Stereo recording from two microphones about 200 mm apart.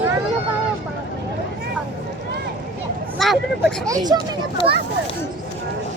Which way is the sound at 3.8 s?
20° right (ahead or behind).